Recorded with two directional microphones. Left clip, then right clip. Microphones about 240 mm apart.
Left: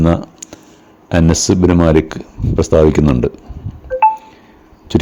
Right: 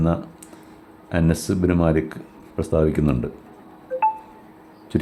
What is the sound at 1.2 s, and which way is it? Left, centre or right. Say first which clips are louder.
Speech: left 10 dB; left.